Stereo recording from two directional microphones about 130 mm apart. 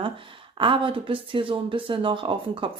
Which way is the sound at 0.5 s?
40° right (ahead or behind).